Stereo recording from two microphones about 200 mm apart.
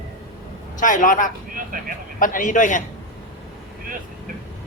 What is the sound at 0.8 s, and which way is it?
Speech, 40° left (ahead or behind).